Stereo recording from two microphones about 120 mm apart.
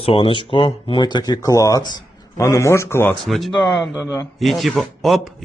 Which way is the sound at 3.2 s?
Centre (ahead or behind).